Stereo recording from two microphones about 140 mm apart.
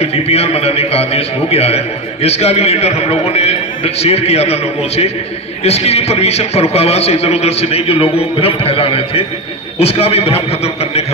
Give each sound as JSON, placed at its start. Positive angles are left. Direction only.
{"t": 0.0, "sound": "a man's voice", "side_deg": 45}